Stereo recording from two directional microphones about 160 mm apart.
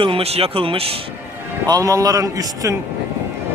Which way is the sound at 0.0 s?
35° right (ahead or behind).